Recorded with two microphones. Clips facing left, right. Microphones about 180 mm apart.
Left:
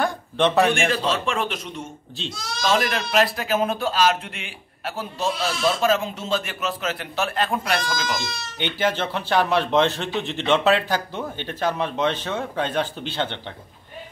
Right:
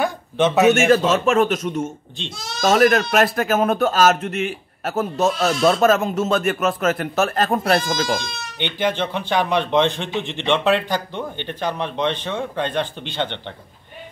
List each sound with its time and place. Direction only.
0.0 s a sound: 5° right (ahead or behind)
0.8 s a man's voice: 45° right (ahead or behind)
8.5 s a man's voice: 5° left (ahead or behind)